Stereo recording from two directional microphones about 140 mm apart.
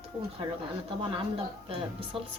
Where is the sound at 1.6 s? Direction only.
40° right (ahead or behind).